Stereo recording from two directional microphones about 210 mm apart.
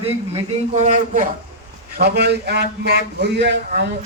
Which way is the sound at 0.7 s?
35° right (ahead or behind).